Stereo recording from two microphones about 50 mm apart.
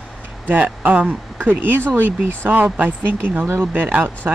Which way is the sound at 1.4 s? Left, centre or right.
Right.